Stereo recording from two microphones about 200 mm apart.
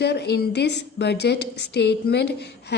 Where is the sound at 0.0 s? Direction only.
55° left (ahead or behind).